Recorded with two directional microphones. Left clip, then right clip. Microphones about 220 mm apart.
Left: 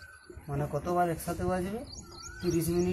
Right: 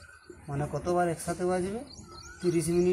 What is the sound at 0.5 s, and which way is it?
Speech, 10° left (ahead or behind).